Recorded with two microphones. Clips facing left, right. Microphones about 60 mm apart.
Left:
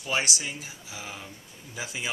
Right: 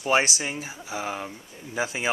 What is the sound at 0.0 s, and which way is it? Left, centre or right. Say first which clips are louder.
Speech: right 6 dB; right.